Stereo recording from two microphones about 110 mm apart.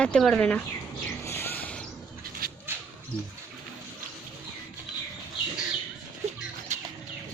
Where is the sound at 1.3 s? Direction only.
20° left (ahead or behind).